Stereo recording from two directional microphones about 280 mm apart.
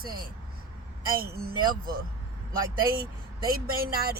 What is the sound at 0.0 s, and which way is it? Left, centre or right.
Speech, right.